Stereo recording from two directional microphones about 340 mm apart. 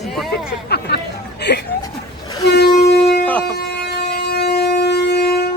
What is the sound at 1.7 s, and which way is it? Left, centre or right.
Chuckle, centre.